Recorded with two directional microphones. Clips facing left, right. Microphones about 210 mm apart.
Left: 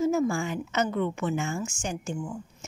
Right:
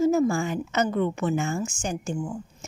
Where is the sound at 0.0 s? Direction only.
35° right (ahead or behind).